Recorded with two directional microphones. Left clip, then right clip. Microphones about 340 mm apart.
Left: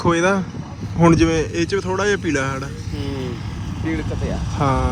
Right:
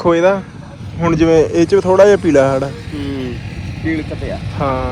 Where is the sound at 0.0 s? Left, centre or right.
Centre.